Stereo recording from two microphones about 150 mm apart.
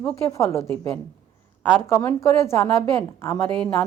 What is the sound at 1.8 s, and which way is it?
A woman's voice, 20° left (ahead or behind).